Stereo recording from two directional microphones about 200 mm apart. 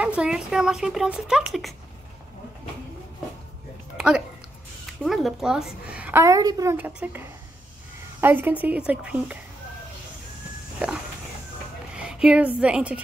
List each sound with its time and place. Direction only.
0.0 s speech: 5° right (ahead or behind)
4.8 s a woman's voice: centre (ahead or behind)
11.9 s a woman's voice: 5° right (ahead or behind)